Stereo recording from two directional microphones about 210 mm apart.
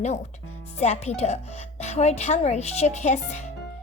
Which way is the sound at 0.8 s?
30° left (ahead or behind).